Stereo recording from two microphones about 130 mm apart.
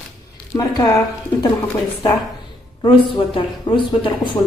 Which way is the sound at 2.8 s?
40° left (ahead or behind).